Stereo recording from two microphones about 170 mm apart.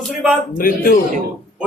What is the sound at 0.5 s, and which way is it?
Speech, 55° left (ahead or behind).